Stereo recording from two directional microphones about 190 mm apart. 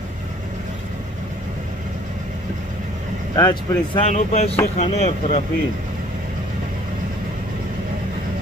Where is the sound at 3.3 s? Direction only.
20° left (ahead or behind).